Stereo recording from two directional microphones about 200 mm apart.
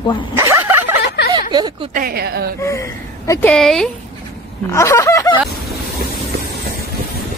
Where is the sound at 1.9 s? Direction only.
50° right (ahead or behind).